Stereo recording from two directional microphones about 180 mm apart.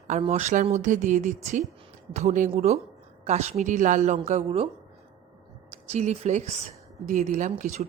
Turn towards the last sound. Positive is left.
turn(degrees=-45)  # may be behind; listen again after turning